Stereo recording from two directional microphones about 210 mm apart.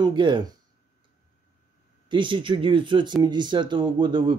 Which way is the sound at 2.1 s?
25° right (ahead or behind).